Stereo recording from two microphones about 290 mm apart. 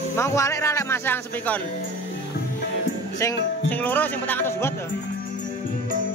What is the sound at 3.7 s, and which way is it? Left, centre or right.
Speech, centre.